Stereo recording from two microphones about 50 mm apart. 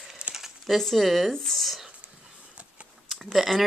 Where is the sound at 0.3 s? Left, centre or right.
Centre.